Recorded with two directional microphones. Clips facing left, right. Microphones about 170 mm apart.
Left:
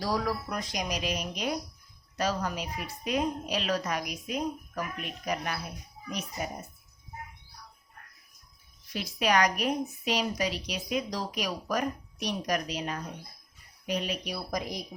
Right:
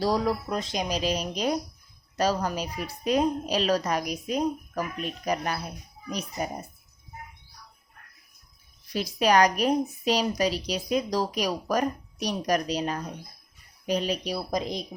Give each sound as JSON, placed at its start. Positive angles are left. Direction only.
{"t": 0.0, "sound": "a woman's voice", "side_deg": -25}
{"t": 8.9, "sound": "a woman's voice", "side_deg": -35}